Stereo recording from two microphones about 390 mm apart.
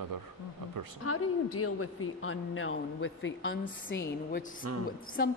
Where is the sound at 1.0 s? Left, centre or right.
Left.